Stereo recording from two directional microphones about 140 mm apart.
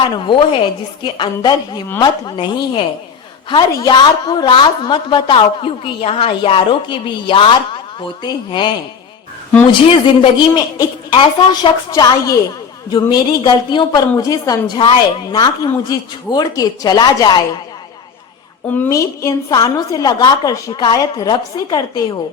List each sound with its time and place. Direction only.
0.1 s a woman's voice: 35° left (ahead or behind)
9.9 s a woman's voice: 35° left (ahead or behind)
18.9 s a woman's voice: 25° left (ahead or behind)